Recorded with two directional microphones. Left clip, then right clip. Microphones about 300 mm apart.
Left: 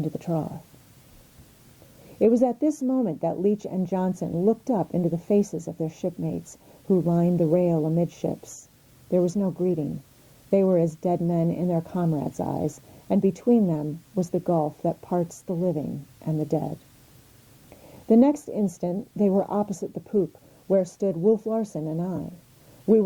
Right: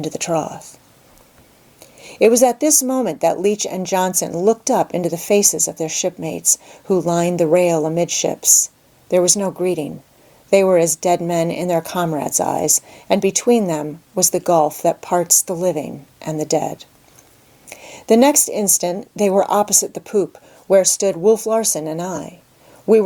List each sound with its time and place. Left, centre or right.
0.2 s speech: centre
2.2 s speech: centre
6.8 s speech: centre
18.1 s speech: centre
21.2 s speech: centre